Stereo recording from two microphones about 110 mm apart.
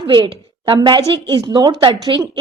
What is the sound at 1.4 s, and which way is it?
A woman's voice, 40° right (ahead or behind).